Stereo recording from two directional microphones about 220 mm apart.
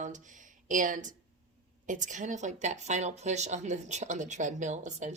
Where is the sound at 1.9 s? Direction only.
35° right (ahead or behind).